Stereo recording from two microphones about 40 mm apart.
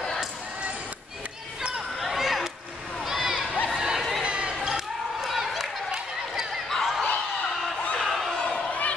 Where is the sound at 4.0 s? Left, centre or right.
Centre.